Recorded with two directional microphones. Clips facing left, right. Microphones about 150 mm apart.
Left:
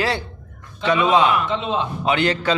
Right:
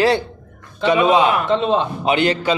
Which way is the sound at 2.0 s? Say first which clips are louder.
Right 3 dB; 20° right (ahead or behind).